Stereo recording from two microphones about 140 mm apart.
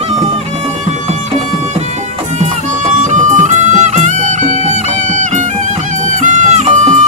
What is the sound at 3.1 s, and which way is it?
Music, 60° right (ahead or behind).